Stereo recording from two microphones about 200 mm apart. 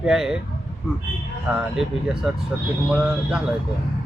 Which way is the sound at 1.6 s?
5° right (ahead or behind).